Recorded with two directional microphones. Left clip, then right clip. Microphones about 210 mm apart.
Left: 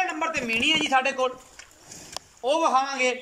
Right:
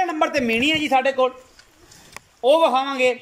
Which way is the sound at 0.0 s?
25° right (ahead or behind).